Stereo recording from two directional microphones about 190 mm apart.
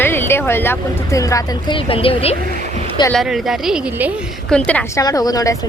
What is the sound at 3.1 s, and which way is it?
Speech, centre (ahead or behind).